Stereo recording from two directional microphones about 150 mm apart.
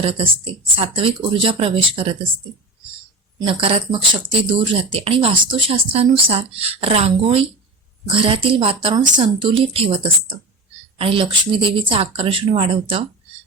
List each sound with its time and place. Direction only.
0.0 s speech: 40° right (ahead or behind)
3.4 s speech: 40° right (ahead or behind)